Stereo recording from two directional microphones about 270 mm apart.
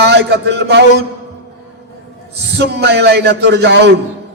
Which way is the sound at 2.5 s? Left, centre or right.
Right.